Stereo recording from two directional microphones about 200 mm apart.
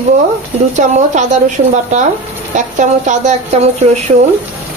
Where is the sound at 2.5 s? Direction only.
40° right (ahead or behind).